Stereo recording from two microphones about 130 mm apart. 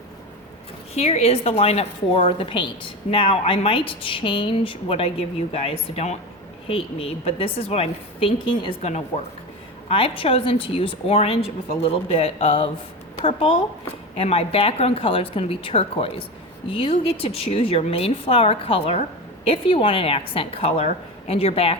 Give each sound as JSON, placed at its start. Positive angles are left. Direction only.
{"t": 0.9, "sound": "speech", "side_deg": 55}